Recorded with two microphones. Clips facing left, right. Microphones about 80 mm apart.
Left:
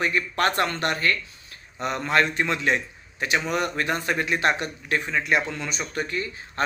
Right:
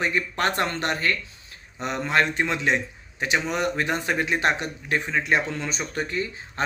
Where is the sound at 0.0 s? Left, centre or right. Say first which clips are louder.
Left 1 dB; right.